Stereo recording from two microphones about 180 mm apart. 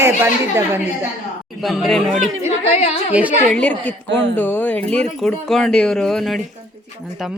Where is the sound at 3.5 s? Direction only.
10° left (ahead or behind).